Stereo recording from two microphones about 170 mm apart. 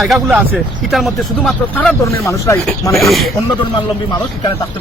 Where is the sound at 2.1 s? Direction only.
15° left (ahead or behind).